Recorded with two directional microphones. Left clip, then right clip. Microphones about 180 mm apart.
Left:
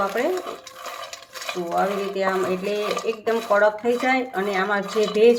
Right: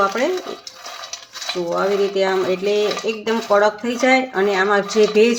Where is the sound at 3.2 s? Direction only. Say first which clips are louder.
Right 3 dB; 60° right (ahead or behind).